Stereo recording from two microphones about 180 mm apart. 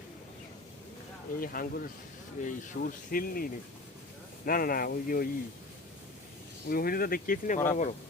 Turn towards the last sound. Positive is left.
turn(degrees=40)  # may be behind; listen again after turning